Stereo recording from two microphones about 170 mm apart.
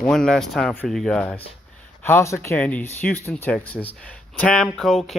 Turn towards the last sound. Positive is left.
turn(degrees=0)  # may be behind; listen again after turning